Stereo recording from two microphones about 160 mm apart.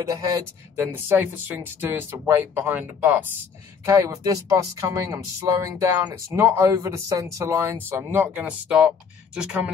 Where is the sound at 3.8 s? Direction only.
20° right (ahead or behind).